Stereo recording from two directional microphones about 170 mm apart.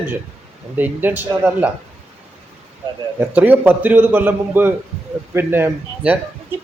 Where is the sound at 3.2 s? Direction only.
10° right (ahead or behind).